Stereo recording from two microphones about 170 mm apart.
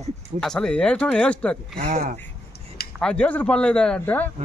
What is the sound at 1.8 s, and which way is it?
Speech, 40° right (ahead or behind).